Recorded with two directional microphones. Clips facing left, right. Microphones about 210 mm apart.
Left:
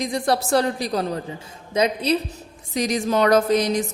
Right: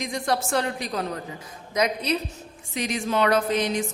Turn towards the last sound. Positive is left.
turn(degrees=40)  # may be behind; listen again after turning